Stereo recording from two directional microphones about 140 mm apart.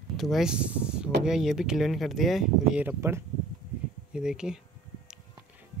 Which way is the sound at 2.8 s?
20° right (ahead or behind).